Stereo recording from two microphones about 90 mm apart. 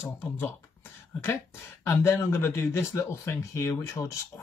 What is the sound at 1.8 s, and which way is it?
Speech, 30° left (ahead or behind).